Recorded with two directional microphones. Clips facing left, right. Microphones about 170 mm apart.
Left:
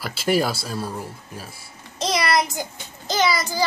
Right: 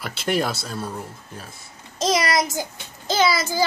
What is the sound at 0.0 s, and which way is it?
Speech, 5° left (ahead or behind).